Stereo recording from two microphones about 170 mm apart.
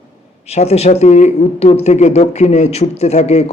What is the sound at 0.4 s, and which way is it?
Speech, 40° left (ahead or behind).